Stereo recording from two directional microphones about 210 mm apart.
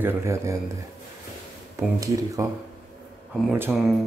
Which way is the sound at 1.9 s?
15° right (ahead or behind).